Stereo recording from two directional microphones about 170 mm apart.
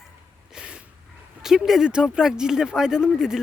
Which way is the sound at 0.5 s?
5° right (ahead or behind).